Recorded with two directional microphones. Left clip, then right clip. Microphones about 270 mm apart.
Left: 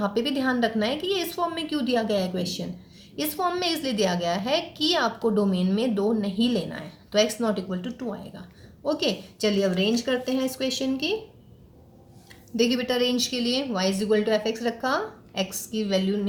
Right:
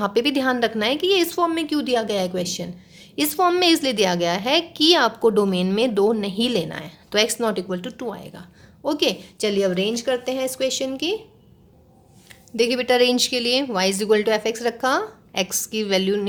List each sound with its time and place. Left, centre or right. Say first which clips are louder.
0.0 s a woman's voice: right 5 dB; right
12.5 s a woman's voice: right 6 dB; right